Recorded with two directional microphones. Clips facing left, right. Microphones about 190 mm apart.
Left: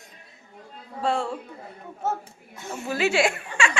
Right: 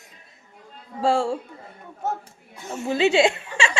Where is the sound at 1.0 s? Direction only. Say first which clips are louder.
Right 5 dB; 30° right (ahead or behind).